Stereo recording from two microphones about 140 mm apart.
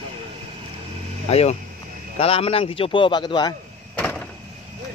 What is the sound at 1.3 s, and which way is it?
A man's voice, 50° left (ahead or behind).